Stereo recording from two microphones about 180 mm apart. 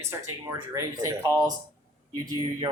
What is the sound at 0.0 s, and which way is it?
Speech, 20° right (ahead or behind).